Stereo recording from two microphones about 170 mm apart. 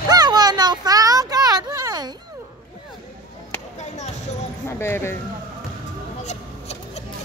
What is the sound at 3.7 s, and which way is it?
Basketball bounce, 45° left (ahead or behind).